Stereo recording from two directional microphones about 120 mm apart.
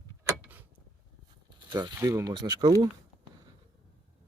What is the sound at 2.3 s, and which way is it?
Speech, 40° right (ahead or behind).